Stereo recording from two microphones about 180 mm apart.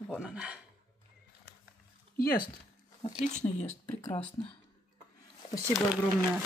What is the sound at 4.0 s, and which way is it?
Speech, 30° left (ahead or behind).